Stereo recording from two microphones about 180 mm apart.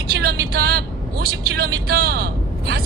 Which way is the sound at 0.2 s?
60° right (ahead or behind).